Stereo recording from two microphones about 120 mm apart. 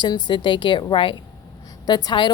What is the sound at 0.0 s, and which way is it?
A woman's voice, 40° left (ahead or behind).